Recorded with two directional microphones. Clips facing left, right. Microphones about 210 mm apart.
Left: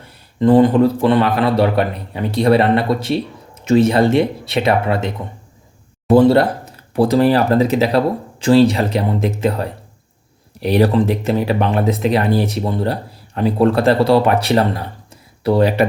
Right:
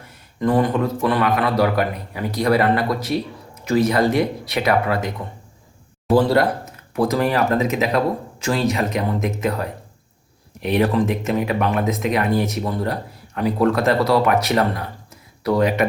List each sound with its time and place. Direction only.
0.0 s speech: 25° left (ahead or behind)
6.1 s speech: 25° left (ahead or behind)